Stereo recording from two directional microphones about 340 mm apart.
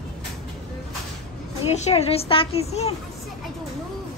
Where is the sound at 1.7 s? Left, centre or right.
Centre.